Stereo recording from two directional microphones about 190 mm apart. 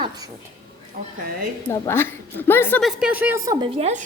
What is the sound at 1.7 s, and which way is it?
A woman's voice, 15° left (ahead or behind).